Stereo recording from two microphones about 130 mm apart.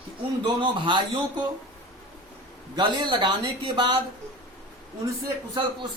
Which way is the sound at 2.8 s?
35° right (ahead or behind).